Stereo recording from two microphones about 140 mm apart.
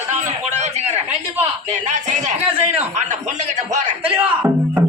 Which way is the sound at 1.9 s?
55° right (ahead or behind).